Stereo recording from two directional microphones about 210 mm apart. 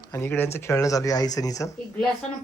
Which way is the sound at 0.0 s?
15° left (ahead or behind).